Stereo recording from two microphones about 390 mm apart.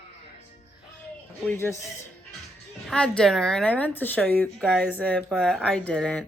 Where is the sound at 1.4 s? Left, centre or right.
Centre.